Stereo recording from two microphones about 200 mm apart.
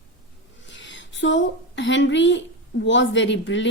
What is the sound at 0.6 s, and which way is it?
A woman's voice, 65° left (ahead or behind).